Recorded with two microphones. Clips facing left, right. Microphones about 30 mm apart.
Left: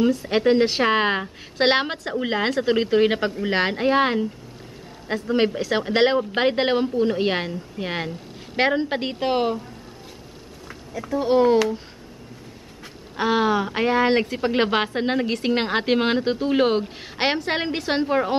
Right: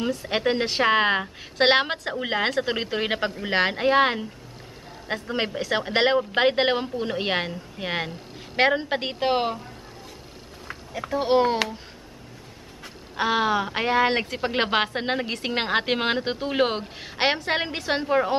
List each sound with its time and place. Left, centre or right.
0.0 s a woman's voice: centre
10.7 s speech: right
13.1 s a woman's voice: centre